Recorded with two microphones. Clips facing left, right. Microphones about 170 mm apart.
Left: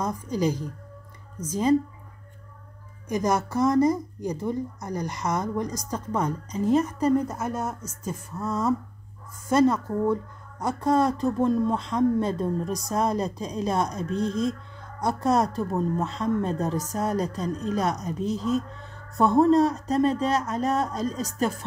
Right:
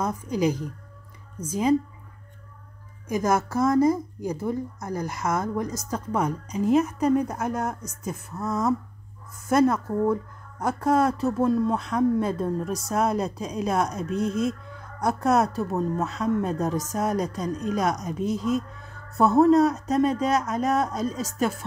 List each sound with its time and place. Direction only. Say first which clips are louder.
0.0 s speech: right 1 dB; 10° right (ahead or behind)
3.1 s speech: right 1 dB; 5° right (ahead or behind)